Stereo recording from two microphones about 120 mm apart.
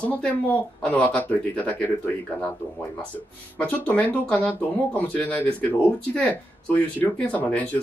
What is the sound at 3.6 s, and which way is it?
Speech, 15° left (ahead or behind).